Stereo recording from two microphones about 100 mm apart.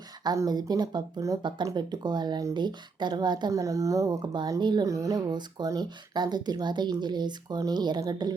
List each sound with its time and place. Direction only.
0.4 s speech: 45° right (ahead or behind)